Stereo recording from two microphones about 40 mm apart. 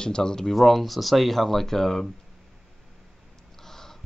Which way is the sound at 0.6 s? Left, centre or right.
Centre.